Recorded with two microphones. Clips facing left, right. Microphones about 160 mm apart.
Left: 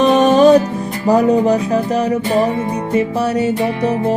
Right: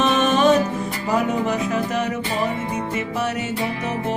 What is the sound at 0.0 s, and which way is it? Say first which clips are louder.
Music: left 8 dB; 35° left (ahead or behind).